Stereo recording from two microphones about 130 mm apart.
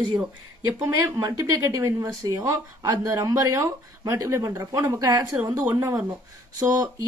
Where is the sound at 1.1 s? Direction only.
25° right (ahead or behind).